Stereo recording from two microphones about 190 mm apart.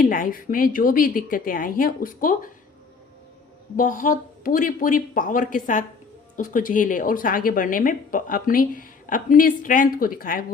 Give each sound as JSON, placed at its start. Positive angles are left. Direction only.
{"t": 0.0, "sound": "a woman's voice", "side_deg": 45}
{"t": 3.8, "sound": "a woman's voice", "side_deg": 45}